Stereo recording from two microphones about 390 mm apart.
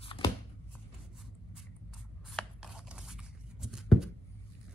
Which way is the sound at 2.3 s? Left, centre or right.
Centre.